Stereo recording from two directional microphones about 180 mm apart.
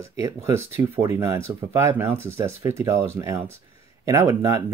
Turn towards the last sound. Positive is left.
turn(degrees=-15)  # may be behind; listen again after turning